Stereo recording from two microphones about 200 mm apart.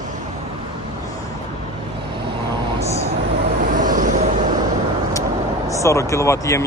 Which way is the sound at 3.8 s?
40° right (ahead or behind).